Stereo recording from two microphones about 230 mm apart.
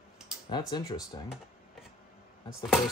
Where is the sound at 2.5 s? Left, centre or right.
Centre.